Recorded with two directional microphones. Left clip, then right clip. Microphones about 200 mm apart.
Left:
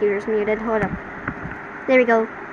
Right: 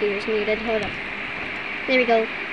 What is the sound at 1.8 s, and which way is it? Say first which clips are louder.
Speech: left 3 dB; 20° left (ahead or behind).